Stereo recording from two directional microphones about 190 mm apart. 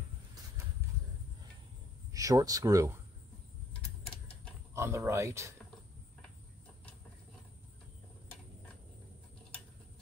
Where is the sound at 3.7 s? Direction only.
5° left (ahead or behind).